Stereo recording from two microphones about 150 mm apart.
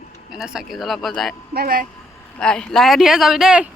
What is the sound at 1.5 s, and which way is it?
Speech, 80° right.